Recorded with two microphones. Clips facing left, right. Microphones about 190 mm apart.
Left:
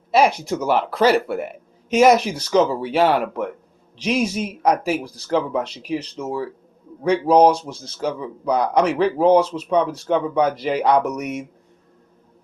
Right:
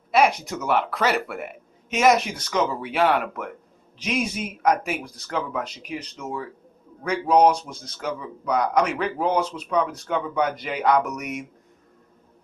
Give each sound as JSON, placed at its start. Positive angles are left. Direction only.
{"t": 0.1, "sound": "speech", "side_deg": 30}